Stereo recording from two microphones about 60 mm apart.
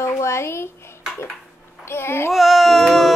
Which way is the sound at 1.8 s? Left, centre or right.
Left.